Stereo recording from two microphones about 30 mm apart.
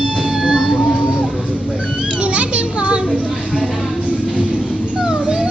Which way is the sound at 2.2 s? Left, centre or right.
Right.